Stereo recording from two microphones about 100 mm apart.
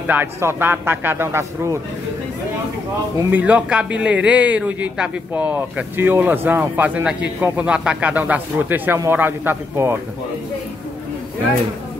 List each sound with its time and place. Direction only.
0.0 s a man's voice: 20° right (ahead or behind)
3.3 s a man's voice: 15° right (ahead or behind)